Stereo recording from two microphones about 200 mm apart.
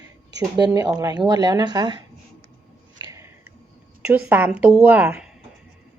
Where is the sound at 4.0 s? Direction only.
5° right (ahead or behind).